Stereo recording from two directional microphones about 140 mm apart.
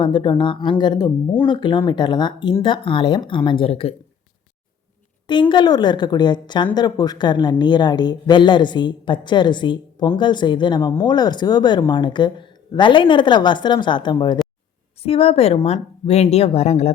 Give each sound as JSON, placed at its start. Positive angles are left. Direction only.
{"t": 0.0, "sound": "speech", "side_deg": 35}
{"t": 5.2, "sound": "speech", "side_deg": 35}
{"t": 15.0, "sound": "speech", "side_deg": 45}